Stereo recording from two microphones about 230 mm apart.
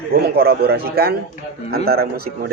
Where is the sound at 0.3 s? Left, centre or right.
Right.